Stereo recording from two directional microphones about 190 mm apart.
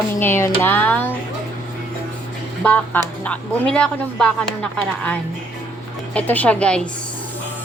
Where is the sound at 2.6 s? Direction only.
5° left (ahead or behind).